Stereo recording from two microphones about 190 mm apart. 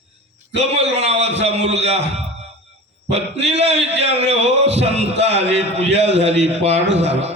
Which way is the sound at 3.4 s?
65° right (ahead or behind).